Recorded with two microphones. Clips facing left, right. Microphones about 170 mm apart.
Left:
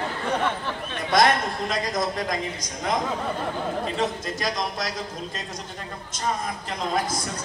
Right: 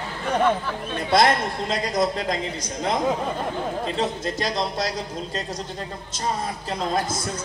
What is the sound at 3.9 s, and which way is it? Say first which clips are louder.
Speech: right 2 dB; 30° right (ahead or behind).